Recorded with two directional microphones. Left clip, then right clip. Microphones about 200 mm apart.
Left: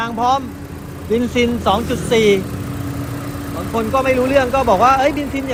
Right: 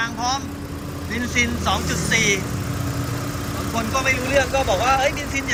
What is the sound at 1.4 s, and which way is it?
Speech, 15° left (ahead or behind).